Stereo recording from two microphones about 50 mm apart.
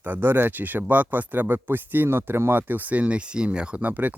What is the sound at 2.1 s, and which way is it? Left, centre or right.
Speech, right.